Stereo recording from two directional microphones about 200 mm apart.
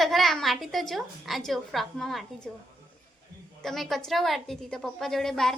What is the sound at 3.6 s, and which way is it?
A woman's voice, centre (ahead or behind).